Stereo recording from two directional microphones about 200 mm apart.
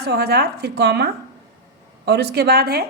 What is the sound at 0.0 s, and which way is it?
A woman's voice, 55° right (ahead or behind).